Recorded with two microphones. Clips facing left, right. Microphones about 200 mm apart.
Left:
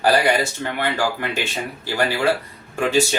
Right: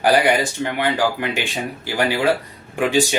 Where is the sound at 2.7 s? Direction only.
15° right (ahead or behind).